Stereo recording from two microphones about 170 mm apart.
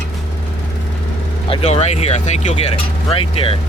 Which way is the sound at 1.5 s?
35° left (ahead or behind).